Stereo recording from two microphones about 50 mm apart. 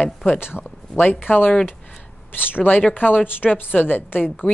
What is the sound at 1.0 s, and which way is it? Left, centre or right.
A woman's voice, left.